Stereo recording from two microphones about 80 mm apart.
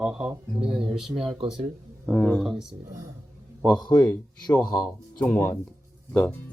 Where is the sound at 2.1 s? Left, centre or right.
Centre.